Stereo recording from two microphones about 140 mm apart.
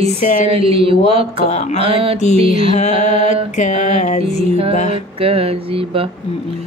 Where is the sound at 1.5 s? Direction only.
50° left (ahead or behind).